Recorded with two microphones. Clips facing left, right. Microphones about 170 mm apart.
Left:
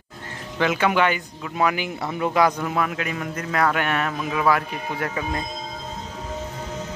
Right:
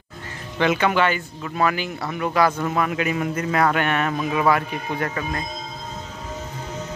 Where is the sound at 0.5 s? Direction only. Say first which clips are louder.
Right 1 dB; 5° left (ahead or behind).